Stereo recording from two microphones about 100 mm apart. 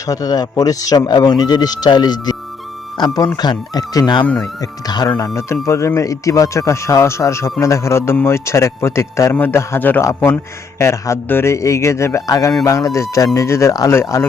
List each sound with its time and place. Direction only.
0.1 s speech: 40° left (ahead or behind)
3.3 s speech: 45° left (ahead or behind)
5.1 s a man's voice: 30° left (ahead or behind)